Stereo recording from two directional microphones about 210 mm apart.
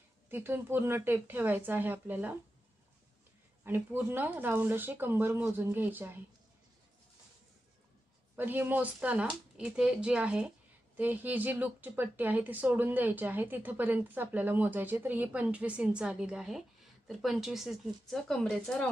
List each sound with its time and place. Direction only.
0.3 s speech: 10° right (ahead or behind)
3.6 s speech: 10° right (ahead or behind)
8.4 s speech: 10° right (ahead or behind)